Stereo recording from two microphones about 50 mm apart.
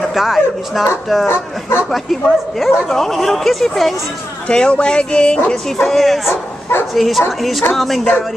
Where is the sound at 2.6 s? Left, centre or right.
Centre.